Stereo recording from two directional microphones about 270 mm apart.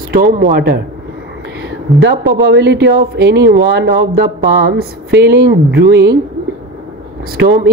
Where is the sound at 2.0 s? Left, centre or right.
Right.